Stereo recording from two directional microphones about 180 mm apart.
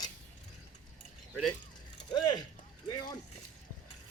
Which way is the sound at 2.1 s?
25° left (ahead or behind).